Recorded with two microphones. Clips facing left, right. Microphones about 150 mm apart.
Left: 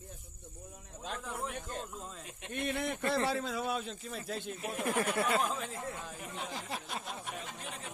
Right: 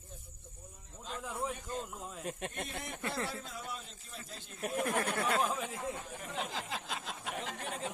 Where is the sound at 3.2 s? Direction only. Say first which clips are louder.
Left 9 dB; 85° left; by 4.5 s 70° left (ahead or behind).